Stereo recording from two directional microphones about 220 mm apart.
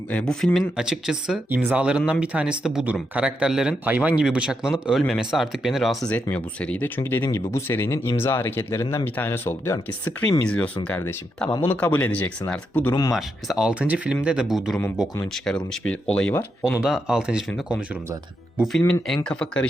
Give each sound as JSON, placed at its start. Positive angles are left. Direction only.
{"t": 0.1, "sound": "speech", "side_deg": 5}
{"t": 13.1, "sound": "speech", "side_deg": 0}
{"t": 18.8, "sound": "speech", "side_deg": 10}